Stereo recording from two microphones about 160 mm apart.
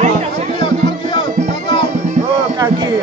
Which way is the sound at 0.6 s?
30° left (ahead or behind).